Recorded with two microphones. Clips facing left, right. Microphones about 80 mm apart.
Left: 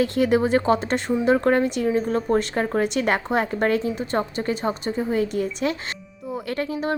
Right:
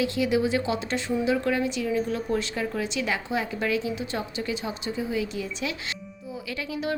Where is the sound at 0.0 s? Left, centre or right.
Left.